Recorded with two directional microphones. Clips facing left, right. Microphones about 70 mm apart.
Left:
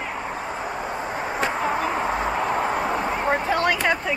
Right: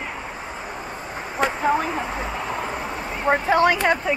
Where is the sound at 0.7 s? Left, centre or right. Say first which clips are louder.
Left 4 dB; left.